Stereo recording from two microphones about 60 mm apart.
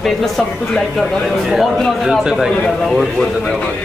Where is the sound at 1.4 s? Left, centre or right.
Centre.